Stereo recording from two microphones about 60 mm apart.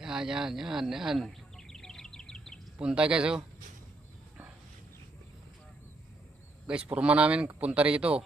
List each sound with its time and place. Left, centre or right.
0.0 s speech: centre
1.3 s bird: centre
2.7 s speech: centre
6.7 s speech: right